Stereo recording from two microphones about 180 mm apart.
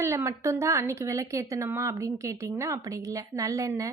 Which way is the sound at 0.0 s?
15° right (ahead or behind).